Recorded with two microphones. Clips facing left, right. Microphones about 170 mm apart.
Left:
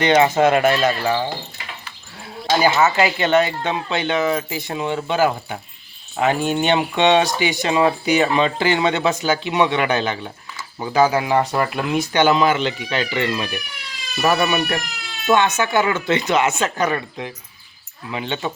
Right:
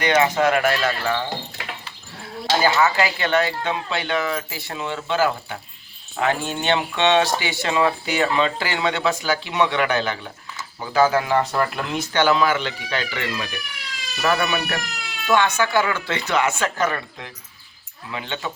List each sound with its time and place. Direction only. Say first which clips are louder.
0.0 s speech: left 4 dB; 25° left (ahead or behind)
2.6 s speech: left 2 dB; 20° left (ahead or behind)